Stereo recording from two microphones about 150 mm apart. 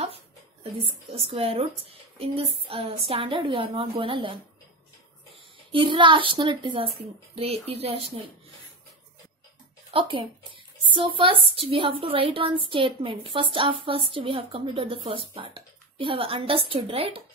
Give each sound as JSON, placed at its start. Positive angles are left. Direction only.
{"t": 0.8, "sound": "speech", "side_deg": -40}
{"t": 5.7, "sound": "speech", "side_deg": -35}
{"t": 9.8, "sound": "speech", "side_deg": -35}